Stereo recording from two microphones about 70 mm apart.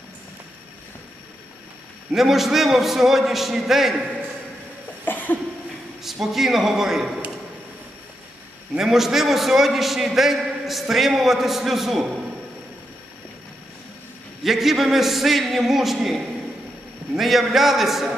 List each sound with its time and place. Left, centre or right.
2.1 s a man's voice: centre
5.0 s a sound: left
6.0 s a man's voice: centre
8.7 s a man's voice: centre
14.4 s a man's voice: centre
17.2 s a man's voice: centre